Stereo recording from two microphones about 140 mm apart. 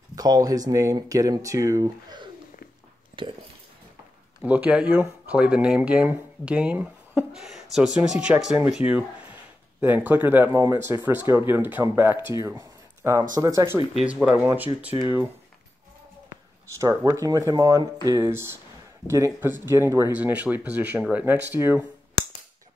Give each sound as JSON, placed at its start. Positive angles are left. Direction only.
{"t": 0.1, "sound": "speech", "side_deg": -25}
{"t": 3.2, "sound": "speech", "side_deg": -35}
{"t": 4.4, "sound": "speech", "side_deg": -10}
{"t": 10.5, "sound": "speech", "side_deg": -25}
{"t": 13.9, "sound": "speech", "side_deg": -5}
{"t": 17.0, "sound": "speech", "side_deg": -25}